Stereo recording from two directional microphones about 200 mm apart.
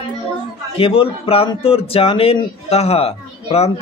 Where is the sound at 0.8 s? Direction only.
25° left (ahead or behind).